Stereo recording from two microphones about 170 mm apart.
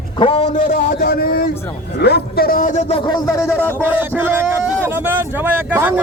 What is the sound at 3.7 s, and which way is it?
A man's voice, 10° right (ahead or behind).